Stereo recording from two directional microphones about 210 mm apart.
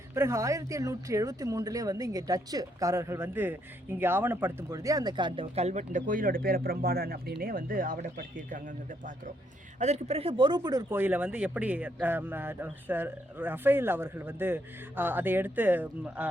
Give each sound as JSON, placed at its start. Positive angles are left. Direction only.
{"t": 0.1, "sound": "speech", "side_deg": -15}